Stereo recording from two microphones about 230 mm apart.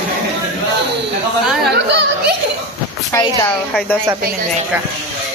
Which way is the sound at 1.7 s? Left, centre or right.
Right.